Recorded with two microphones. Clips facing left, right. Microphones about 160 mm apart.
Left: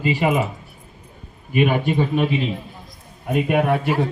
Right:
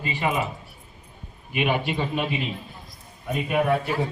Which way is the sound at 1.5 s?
45° left (ahead or behind).